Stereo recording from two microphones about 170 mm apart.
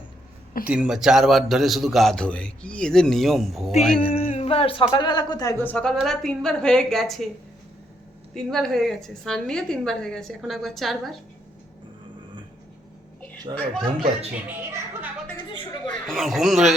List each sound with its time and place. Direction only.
0.6 s a man's voice: 5° right (ahead or behind)
4.1 s speech: 35° left (ahead or behind)
5.6 s a woman's voice: 5° left (ahead or behind)
8.4 s a man's voice: centre (ahead or behind)
13.5 s speech: 25° right (ahead or behind)
15.4 s a sound: 25° left (ahead or behind)
16.0 s a man's voice: centre (ahead or behind)